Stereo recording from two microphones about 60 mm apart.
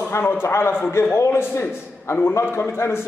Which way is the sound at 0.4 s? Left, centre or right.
Left.